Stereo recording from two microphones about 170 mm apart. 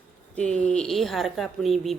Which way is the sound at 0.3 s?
5° left (ahead or behind).